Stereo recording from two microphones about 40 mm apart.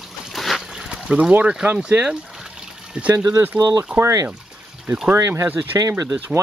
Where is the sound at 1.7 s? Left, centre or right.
Right.